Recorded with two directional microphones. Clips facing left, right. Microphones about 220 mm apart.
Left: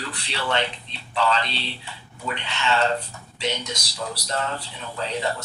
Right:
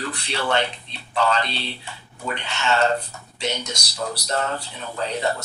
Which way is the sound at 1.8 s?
45° right (ahead or behind).